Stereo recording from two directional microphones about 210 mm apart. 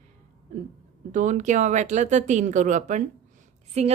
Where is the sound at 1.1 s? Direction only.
35° right (ahead or behind).